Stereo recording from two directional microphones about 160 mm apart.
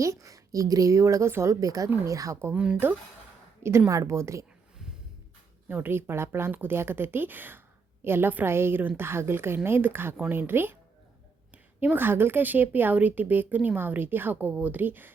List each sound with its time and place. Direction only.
0.0 s a woman's voice: 20° right (ahead or behind)
5.6 s a woman's voice: 10° right (ahead or behind)